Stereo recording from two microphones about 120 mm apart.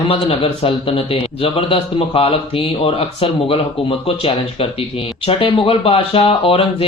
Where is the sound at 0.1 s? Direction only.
50° left (ahead or behind).